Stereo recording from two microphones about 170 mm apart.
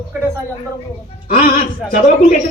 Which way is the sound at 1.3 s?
50° left (ahead or behind).